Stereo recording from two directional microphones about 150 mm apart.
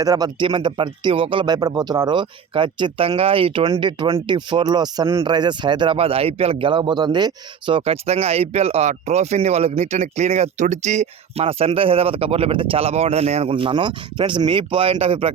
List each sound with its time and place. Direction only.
0.0 s speech: 25° right (ahead or behind)